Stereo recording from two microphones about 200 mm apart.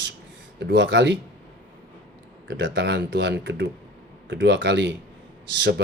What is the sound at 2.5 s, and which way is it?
Speech, 65° right (ahead or behind).